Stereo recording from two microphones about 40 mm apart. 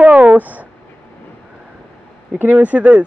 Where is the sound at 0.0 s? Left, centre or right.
Right.